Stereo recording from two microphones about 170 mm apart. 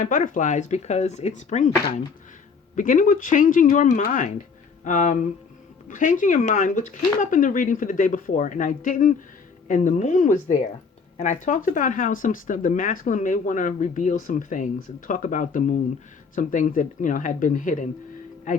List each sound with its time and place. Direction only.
0.0 s speech: 50° left (ahead or behind)
2.7 s speech: 50° left (ahead or behind)